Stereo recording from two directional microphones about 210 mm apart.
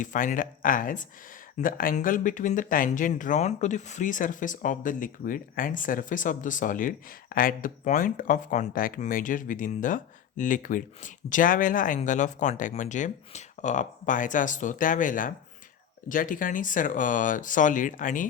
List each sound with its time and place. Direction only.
0.0 s speech: 35° left (ahead or behind)